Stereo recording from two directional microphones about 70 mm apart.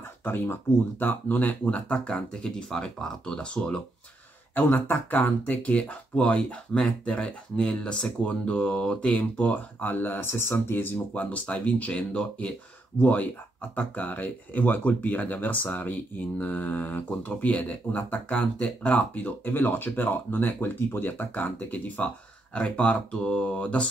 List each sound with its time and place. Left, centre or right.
0.2 s speech: left
4.6 s speech: left